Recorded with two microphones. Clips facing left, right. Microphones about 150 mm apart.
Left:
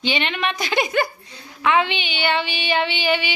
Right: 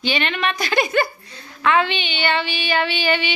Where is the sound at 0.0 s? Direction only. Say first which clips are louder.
Right 1 dB; 20° left (ahead or behind).